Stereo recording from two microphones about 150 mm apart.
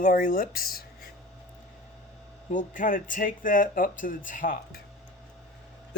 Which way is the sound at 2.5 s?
60° left (ahead or behind).